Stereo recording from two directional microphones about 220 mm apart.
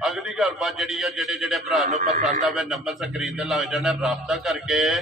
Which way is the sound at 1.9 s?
35° right (ahead or behind).